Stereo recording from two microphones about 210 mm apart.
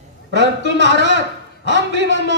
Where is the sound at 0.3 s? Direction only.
60° right (ahead or behind).